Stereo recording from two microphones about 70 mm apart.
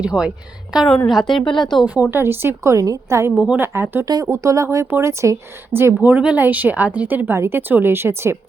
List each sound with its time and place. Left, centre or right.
0.0 s a woman's voice: centre
1.0 s a woman's voice: centre
2.0 s a woman's voice: right
2.7 s a woman's voice: right
3.7 s a woman's voice: right
4.0 s speech: right
4.3 s a woman's voice: right
5.7 s a woman's voice: right